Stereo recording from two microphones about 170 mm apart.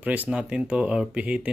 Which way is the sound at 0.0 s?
10° right (ahead or behind).